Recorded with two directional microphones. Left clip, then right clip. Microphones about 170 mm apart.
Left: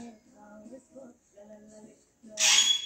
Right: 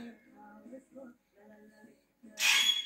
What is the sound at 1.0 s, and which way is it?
Music, 20° left (ahead or behind).